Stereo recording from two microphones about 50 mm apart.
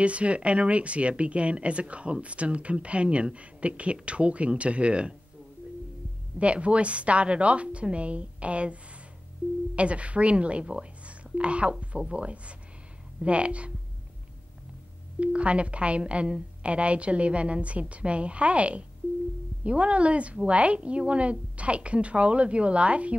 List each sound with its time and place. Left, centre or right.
0.0 s speech: right
6.4 s speech: right
9.8 s speech: right
15.1 s speech: right